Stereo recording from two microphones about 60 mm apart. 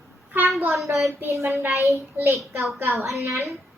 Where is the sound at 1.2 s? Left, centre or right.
Right.